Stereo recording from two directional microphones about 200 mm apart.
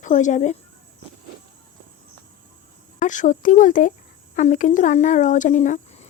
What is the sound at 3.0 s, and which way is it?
Speech, 40° left (ahead or behind).